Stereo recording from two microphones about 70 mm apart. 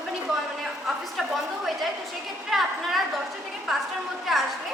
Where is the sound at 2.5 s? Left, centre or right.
Centre.